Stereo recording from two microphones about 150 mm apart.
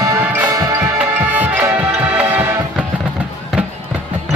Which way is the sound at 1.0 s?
10° right (ahead or behind).